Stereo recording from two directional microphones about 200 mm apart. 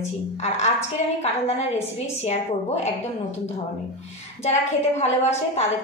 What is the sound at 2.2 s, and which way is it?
Speech, 35° left (ahead or behind).